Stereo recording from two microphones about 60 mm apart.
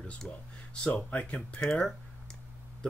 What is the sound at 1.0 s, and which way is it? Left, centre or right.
Speech, left.